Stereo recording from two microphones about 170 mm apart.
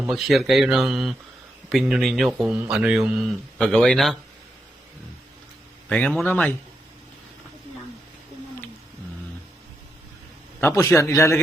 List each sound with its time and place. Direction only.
0.1 s speech: centre (ahead or behind)
5.9 s a man's voice: 5° left (ahead or behind)
10.6 s a man's voice: 15° left (ahead or behind)